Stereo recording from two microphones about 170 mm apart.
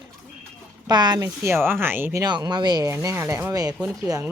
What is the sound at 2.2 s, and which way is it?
Speech, 25° right (ahead or behind).